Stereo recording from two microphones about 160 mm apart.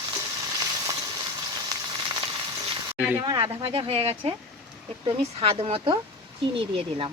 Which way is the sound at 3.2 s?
30° right (ahead or behind).